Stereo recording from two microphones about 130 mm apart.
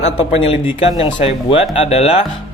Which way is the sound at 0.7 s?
40° left (ahead or behind).